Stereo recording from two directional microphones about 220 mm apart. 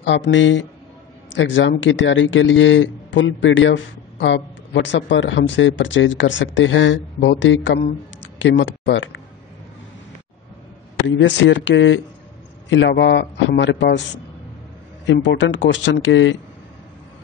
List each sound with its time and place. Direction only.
0.0 s speech: 55° left (ahead or behind)
11.1 s a man's voice: 55° left (ahead or behind)
15.1 s speech: 55° left (ahead or behind)